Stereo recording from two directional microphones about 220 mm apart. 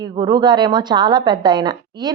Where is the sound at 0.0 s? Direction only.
20° right (ahead or behind).